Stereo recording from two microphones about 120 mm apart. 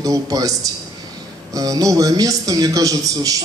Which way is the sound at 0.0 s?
30° right (ahead or behind).